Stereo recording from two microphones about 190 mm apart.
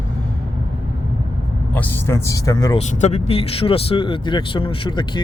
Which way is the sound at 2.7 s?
40° left (ahead or behind).